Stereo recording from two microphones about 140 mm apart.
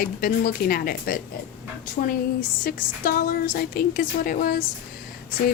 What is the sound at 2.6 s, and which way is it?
A woman's voice, 90° left.